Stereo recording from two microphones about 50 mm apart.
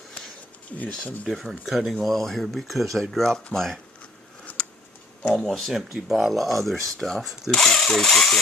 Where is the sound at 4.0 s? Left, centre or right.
Left.